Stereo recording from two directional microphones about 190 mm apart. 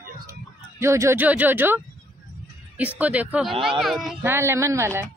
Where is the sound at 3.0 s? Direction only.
5° right (ahead or behind).